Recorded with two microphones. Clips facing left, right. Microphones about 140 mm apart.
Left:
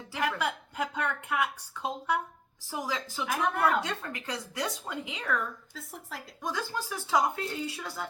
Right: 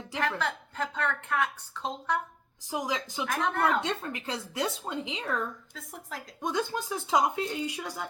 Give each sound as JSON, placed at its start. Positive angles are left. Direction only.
{"t": 0.2, "sound": "a woman's voice", "side_deg": 10}
{"t": 2.6, "sound": "speech", "side_deg": -15}
{"t": 3.2, "sound": "a woman's voice", "side_deg": 10}
{"t": 3.8, "sound": "speech", "side_deg": -25}
{"t": 5.7, "sound": "a woman's voice", "side_deg": 0}
{"t": 6.4, "sound": "speech", "side_deg": -20}